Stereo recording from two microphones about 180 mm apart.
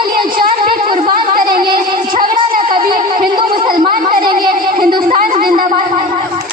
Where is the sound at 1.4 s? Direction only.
55° right (ahead or behind).